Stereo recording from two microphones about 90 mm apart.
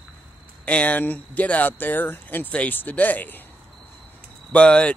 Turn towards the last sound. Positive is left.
turn(degrees=10)  # may be behind; listen again after turning